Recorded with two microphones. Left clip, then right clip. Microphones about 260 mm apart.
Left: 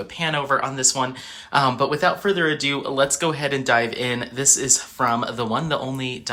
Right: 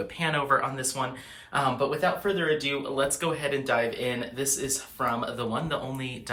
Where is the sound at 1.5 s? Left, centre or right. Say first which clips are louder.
Left 7 dB; left.